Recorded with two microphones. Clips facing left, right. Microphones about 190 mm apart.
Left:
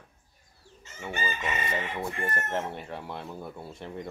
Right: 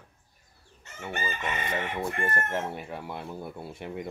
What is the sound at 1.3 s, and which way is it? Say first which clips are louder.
Chicken: left 1 dB; 60° right (ahead or behind).